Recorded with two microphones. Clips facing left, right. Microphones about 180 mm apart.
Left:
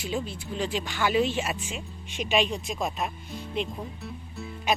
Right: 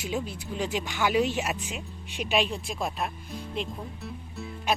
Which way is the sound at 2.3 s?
Centre (ahead or behind).